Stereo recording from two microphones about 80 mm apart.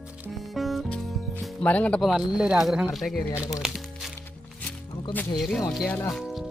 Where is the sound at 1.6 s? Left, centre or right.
Centre.